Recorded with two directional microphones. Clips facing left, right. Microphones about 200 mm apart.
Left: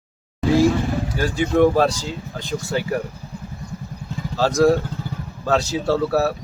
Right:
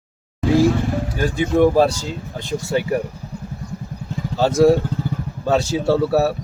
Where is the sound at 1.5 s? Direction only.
10° right (ahead or behind).